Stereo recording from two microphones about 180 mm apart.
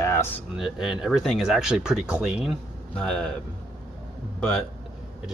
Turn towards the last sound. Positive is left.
turn(degrees=5)  # may be behind; listen again after turning